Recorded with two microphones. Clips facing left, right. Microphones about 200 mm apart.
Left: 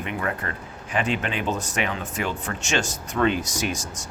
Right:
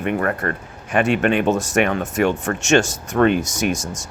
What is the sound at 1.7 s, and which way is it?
Speech, 60° right (ahead or behind).